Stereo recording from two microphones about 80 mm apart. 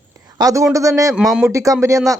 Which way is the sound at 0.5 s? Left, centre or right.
Right.